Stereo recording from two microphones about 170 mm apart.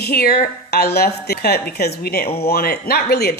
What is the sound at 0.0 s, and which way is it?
A woman's voice, 65° left (ahead or behind).